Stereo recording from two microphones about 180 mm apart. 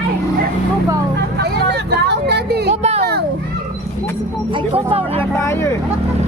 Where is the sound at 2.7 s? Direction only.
35° right (ahead or behind).